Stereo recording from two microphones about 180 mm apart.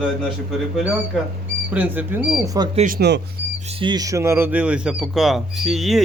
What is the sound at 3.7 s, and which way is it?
Speech, 25° right (ahead or behind).